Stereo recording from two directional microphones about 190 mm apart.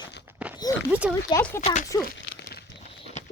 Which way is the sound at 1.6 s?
35° left (ahead or behind).